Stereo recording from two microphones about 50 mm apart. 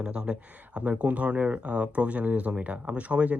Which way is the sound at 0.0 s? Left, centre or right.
Centre.